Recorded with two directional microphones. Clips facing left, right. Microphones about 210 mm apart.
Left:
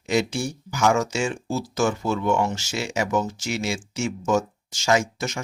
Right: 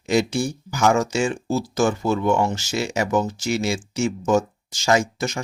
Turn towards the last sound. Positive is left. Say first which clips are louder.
# right 2 dB
turn(degrees=-35)  # may be behind; listen again after turning